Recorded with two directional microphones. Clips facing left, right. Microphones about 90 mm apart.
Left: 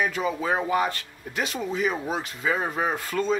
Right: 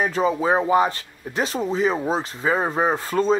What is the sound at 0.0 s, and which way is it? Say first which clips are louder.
Speech: right 5 dB; 35° right (ahead or behind).